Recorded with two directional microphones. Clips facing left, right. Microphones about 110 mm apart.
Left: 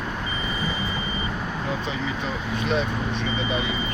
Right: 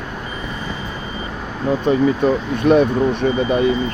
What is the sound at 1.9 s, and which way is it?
Speech, 50° right (ahead or behind).